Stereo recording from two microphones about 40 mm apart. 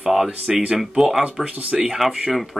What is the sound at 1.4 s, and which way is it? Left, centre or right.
Speech, centre.